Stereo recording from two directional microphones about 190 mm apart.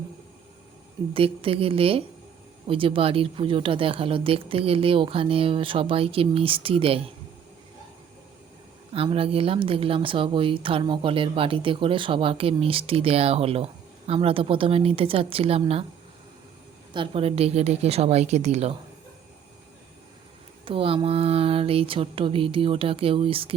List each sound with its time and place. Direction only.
1.1 s speech: 30° right (ahead or behind)
8.9 s speech: 30° right (ahead or behind)
16.9 s speech: 30° right (ahead or behind)
20.7 s speech: 30° right (ahead or behind)